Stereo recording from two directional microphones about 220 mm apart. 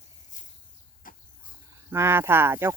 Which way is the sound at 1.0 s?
40° left (ahead or behind).